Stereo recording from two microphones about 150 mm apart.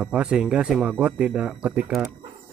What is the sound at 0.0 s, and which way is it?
Speech, 5° right (ahead or behind).